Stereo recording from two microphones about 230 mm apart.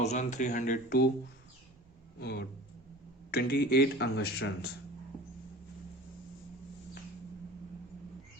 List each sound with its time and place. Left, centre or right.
0.0 s speech: left
2.2 s speech: left